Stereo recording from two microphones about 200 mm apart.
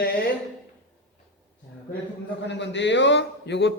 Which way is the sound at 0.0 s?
60° left (ahead or behind).